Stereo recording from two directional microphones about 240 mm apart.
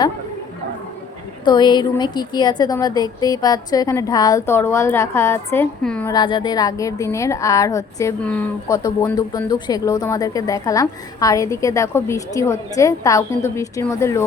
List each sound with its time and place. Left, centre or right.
1.5 s a woman's voice: centre
6.1 s a woman's voice: centre
8.7 s a woman's voice: centre